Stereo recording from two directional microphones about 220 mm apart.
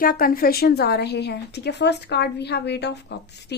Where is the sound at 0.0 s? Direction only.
40° left (ahead or behind).